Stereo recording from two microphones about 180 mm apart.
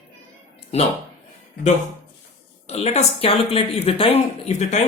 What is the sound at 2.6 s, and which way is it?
A woman's voice, 35° left (ahead or behind).